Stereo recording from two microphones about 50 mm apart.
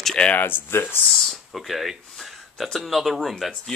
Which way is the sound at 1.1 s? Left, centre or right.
Centre.